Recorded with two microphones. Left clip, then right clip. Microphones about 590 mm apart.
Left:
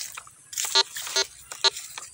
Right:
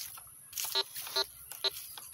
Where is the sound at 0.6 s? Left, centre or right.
Centre.